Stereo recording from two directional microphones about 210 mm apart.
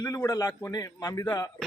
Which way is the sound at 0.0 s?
15° left (ahead or behind).